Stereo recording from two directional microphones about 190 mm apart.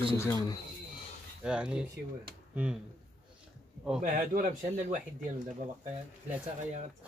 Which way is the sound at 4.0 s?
45° right (ahead or behind).